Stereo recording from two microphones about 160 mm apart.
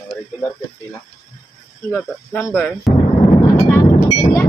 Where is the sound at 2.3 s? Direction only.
10° left (ahead or behind).